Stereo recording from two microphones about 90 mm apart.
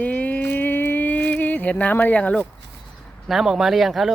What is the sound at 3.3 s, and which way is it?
Speech, 5° right (ahead or behind).